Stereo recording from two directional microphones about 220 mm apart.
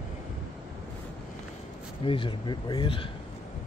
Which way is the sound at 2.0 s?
25° left (ahead or behind).